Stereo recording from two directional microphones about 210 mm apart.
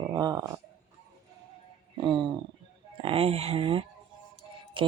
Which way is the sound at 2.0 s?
20° right (ahead or behind).